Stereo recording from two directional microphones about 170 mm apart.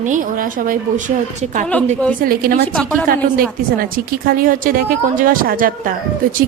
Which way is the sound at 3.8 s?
60° right (ahead or behind).